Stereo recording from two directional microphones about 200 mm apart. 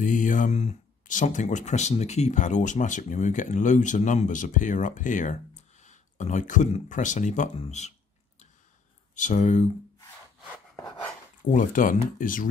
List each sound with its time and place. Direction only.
0.0 s speech: 40° left (ahead or behind)
9.1 s speech: 40° left (ahead or behind)
11.5 s speech: 40° left (ahead or behind)